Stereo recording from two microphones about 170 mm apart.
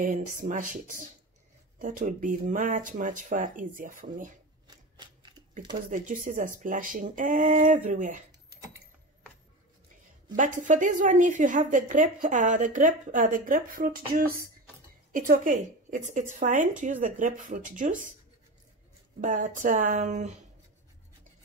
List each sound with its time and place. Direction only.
0.0 s a woman's voice: 50° right (ahead or behind)
4.6 s scissors: 25° right (ahead or behind)
5.9 s a woman's voice: 50° right (ahead or behind)
10.3 s a woman's voice: 50° right (ahead or behind)
19.2 s a woman's voice: 50° right (ahead or behind)